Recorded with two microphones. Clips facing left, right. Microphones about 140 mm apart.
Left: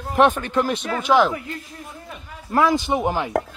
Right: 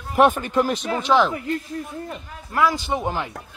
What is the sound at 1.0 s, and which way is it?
Speech, 5° left (ahead or behind).